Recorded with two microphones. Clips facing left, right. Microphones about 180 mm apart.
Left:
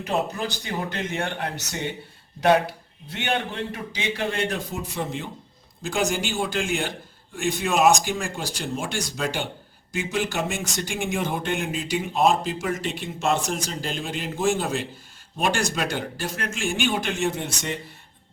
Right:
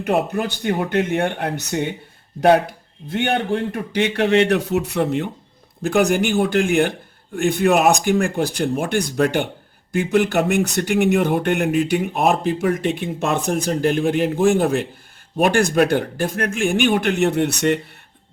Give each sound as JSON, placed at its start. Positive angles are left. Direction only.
{"t": 0.0, "sound": "speech", "side_deg": -55}
{"t": 3.1, "sound": "speech", "side_deg": -55}